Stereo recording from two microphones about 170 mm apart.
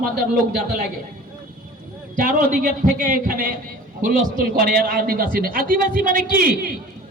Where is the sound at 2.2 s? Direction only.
50° right (ahead or behind).